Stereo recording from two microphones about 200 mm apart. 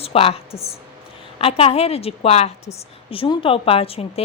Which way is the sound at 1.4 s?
30° left (ahead or behind).